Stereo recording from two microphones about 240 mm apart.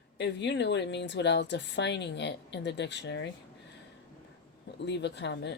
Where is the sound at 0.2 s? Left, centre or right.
Left.